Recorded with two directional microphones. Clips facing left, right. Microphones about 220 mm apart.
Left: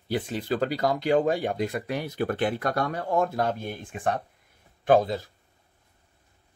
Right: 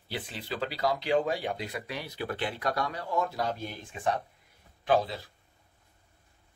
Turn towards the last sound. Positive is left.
turn(degrees=50)  # may be behind; listen again after turning